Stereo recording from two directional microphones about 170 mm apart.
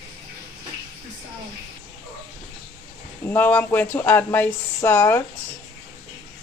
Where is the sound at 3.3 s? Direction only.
10° left (ahead or behind).